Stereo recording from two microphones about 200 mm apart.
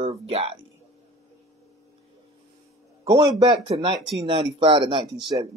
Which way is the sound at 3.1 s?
25° right (ahead or behind).